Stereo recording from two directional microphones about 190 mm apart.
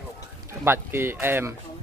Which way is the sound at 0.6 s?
10° right (ahead or behind).